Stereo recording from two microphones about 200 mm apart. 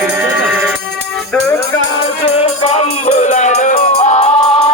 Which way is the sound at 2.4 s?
30° left (ahead or behind).